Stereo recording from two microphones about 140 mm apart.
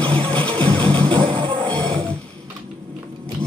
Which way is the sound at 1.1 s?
35° right (ahead or behind).